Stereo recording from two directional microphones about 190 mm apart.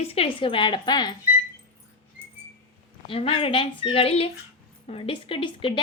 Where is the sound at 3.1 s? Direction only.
30° left (ahead or behind).